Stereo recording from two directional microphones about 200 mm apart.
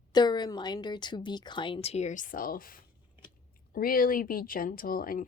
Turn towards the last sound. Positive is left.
turn(degrees=45)  # may be behind; listen again after turning